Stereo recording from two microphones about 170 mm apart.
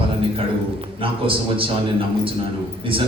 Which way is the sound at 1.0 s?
30° right (ahead or behind).